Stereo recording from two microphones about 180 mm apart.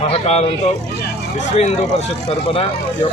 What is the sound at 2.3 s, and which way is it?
Speech, 30° left (ahead or behind).